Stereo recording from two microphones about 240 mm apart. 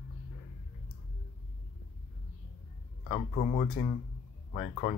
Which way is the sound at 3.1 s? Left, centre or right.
Left.